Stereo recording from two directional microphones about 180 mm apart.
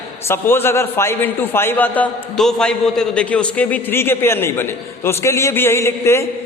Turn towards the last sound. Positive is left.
turn(degrees=15)  # may be behind; listen again after turning